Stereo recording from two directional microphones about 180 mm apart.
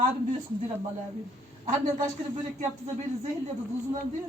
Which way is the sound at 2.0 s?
45° right (ahead or behind).